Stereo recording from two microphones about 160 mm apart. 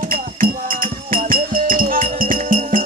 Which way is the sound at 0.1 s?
60° right (ahead or behind).